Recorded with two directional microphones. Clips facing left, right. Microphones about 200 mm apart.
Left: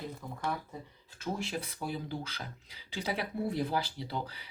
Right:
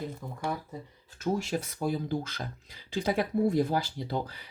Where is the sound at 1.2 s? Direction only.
45° right (ahead or behind).